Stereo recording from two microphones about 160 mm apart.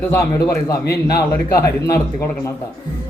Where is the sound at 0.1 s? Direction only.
20° left (ahead or behind).